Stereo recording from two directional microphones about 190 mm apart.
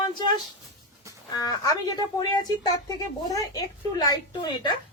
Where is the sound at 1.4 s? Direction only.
20° left (ahead or behind).